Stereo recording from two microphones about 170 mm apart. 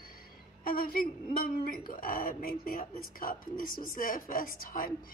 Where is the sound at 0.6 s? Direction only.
60° left (ahead or behind).